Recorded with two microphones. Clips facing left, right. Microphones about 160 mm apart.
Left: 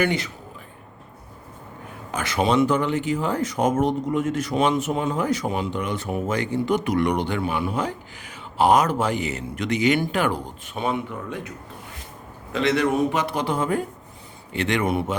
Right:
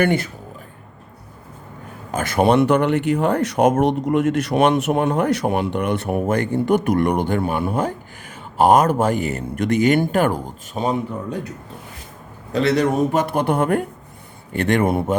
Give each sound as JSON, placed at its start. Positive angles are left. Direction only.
{"t": 0.0, "sound": "a man's voice", "side_deg": -50}
{"t": 2.1, "sound": "speech", "side_deg": -50}
{"t": 12.5, "sound": "a man's voice", "side_deg": -40}
{"t": 14.5, "sound": "a man's voice", "side_deg": -50}